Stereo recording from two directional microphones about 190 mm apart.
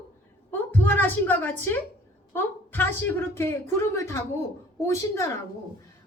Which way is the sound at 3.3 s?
15° left (ahead or behind).